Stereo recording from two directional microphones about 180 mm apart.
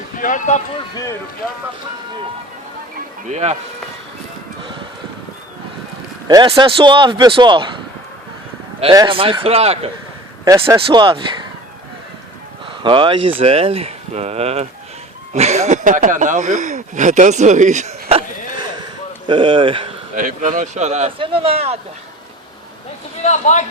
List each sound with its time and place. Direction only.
0.2 s speech: 45° left (ahead or behind)
3.2 s speech: 35° right (ahead or behind)
6.2 s speech: 25° right (ahead or behind)
8.8 s speech: 25° right (ahead or behind)
10.4 s speech: 20° right (ahead or behind)
12.8 s speech: 25° right (ahead or behind)
19.3 s speech: 25° right (ahead or behind)
20.1 s speech: 45° right (ahead or behind)
23.2 s a man's voice: 40° left (ahead or behind)